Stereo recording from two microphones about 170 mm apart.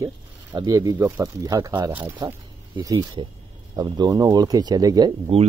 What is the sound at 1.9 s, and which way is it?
Speech, 10° right (ahead or behind).